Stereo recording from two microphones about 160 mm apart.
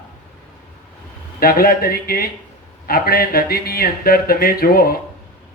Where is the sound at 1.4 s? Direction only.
65° left (ahead or behind).